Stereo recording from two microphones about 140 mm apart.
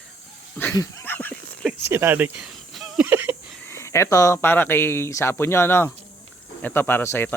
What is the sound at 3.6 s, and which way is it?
Speech, 20° left (ahead or behind).